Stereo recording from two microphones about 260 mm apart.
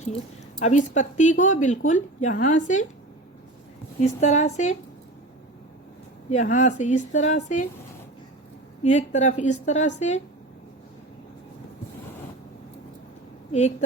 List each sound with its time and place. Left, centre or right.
0.6 s speech: left
4.0 s speech: left
6.3 s speech: left
8.8 s speech: left
13.5 s speech: left